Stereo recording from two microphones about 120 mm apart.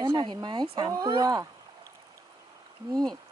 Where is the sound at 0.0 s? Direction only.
40° right (ahead or behind).